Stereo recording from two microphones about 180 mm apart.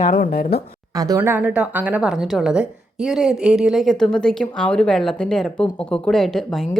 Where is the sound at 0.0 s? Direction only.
55° left (ahead or behind).